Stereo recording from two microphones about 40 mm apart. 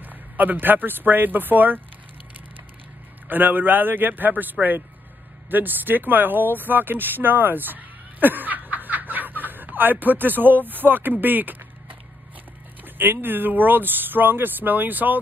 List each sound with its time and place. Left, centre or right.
0.0 s speech: right
3.3 s speech: right